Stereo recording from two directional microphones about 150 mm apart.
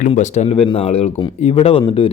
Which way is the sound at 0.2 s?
50° left (ahead or behind).